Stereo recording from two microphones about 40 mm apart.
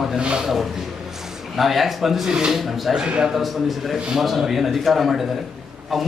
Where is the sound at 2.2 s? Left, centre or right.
Centre.